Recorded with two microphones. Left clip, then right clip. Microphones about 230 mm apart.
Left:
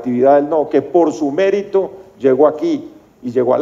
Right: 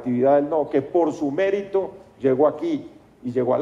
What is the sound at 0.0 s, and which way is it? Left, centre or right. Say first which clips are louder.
A man's voice: left 7 dB; left.